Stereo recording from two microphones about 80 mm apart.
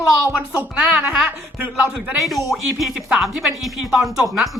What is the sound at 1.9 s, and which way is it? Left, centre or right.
Speech, centre.